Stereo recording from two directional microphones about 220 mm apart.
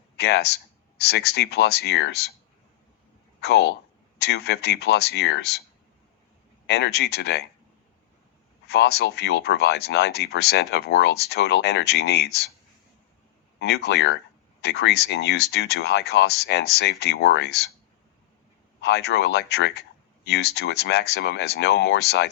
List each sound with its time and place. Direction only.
0.2 s speech: 50° left (ahead or behind)
3.4 s speech: 50° left (ahead or behind)
6.7 s speech: 50° left (ahead or behind)
8.6 s speech: 50° left (ahead or behind)
13.6 s speech: 50° left (ahead or behind)
18.8 s speech: 50° left (ahead or behind)